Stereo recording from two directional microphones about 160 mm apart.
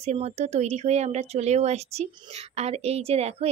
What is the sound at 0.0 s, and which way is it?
Speech, 40° right (ahead or behind).